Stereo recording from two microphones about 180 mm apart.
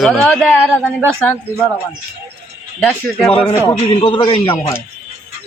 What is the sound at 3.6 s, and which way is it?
Speech, 30° left (ahead or behind).